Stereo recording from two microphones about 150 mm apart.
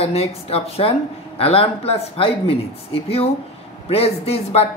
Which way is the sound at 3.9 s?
40° left (ahead or behind).